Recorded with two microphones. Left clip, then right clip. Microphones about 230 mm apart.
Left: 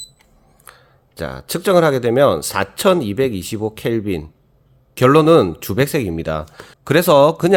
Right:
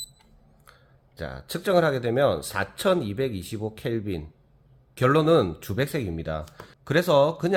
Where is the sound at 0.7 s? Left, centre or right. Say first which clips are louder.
Left 11 dB; left.